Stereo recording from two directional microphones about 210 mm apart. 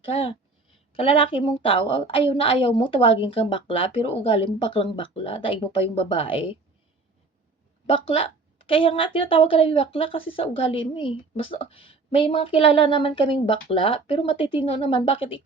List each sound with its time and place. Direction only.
0.0 s speech: 25° left (ahead or behind)
7.9 s speech: 25° left (ahead or behind)